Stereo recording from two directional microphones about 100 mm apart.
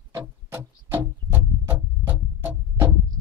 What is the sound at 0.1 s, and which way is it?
Music, 20° right (ahead or behind).